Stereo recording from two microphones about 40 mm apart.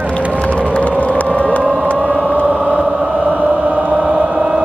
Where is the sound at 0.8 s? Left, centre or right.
Left.